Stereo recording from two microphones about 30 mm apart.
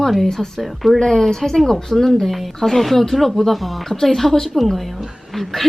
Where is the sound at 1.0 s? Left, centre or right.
Centre.